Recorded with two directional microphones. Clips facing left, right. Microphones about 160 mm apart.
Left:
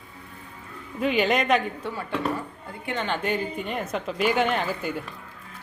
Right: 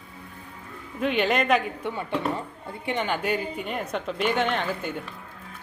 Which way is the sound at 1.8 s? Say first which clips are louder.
Right 1 dB; 20° right (ahead or behind).